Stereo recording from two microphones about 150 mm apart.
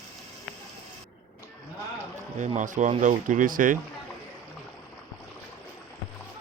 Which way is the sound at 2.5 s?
60° right (ahead or behind).